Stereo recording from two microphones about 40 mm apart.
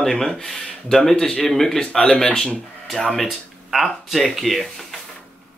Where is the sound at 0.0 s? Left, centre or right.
Centre.